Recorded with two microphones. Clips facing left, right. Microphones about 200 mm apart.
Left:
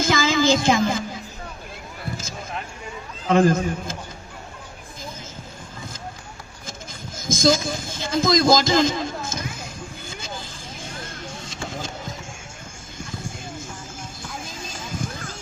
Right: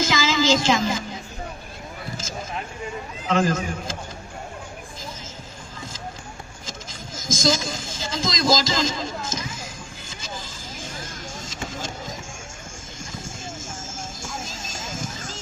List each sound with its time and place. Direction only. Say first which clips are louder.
0.0 s a sound: left 2 dB; 55° left (ahead or behind)
3.2 s a man's voice: left 5 dB; 55° left (ahead or behind)
7.3 s a man's voice: left 4 dB; 55° left (ahead or behind)
10.1 s vehicle: left 3 dB; 55° left (ahead or behind)
11.4 s vehicle: left 1 dB; 60° left (ahead or behind)
13.9 s music: right 1 dB; 45° right (ahead or behind)